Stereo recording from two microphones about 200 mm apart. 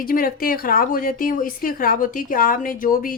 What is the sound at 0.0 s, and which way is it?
Speech, 45° left (ahead or behind).